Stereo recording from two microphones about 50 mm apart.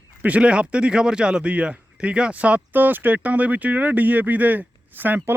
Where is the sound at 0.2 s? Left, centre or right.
Right.